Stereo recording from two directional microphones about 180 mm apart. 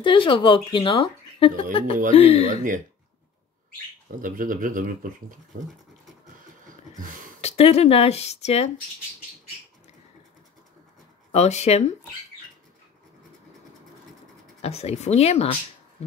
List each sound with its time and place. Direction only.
0.0 s speech: 30° left (ahead or behind)
4.2 s speech: 50° right (ahead or behind)
7.4 s speech: 35° left (ahead or behind)
11.3 s speech: 35° left (ahead or behind)
14.6 s speech: 35° left (ahead or behind)